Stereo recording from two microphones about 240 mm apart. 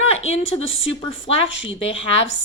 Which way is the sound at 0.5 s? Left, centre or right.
Left.